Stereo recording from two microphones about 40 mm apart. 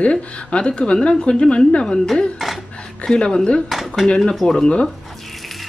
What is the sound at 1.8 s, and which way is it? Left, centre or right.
Speech, centre.